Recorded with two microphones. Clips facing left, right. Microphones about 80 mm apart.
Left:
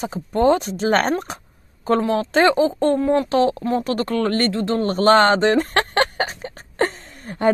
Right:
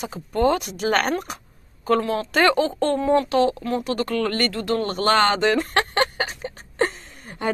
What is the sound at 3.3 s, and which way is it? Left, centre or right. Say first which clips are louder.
Speech: left 2 dB; left.